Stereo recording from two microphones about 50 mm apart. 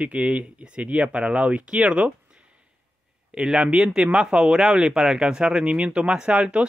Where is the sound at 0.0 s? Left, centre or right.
Right.